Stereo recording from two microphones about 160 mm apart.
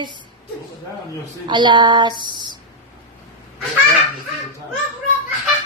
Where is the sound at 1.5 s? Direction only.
30° right (ahead or behind).